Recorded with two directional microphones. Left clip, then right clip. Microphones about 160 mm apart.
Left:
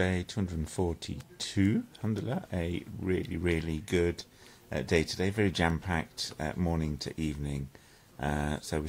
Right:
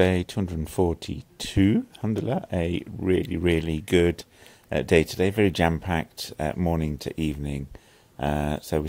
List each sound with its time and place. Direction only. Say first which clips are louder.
0.0 s speech: right 9 dB; 30° right (ahead or behind)